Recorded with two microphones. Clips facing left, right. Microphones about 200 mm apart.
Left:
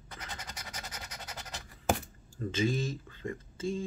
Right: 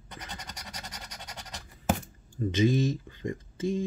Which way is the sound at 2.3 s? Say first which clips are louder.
Right 6 dB; 20° right (ahead or behind).